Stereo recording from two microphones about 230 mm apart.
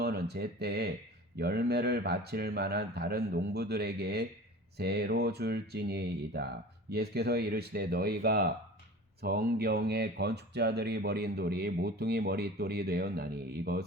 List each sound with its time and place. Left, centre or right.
0.0 s speech: right